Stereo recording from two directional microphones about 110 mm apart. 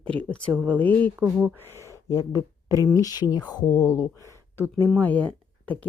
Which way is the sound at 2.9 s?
35° left (ahead or behind).